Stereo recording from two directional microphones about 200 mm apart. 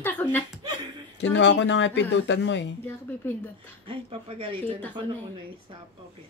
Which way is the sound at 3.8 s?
30° right (ahead or behind).